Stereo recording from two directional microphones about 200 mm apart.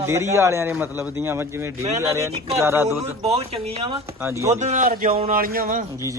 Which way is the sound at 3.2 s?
30° right (ahead or behind).